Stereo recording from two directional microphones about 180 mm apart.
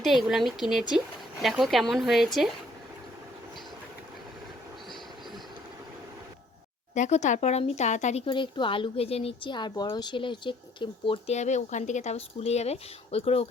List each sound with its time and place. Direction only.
0.0 s speech: centre (ahead or behind)
6.9 s speech: 40° left (ahead or behind)